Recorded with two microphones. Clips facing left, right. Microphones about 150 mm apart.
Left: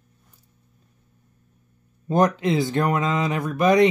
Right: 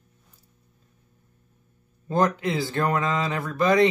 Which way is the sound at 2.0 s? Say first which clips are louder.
Left 3 dB; 20° left (ahead or behind).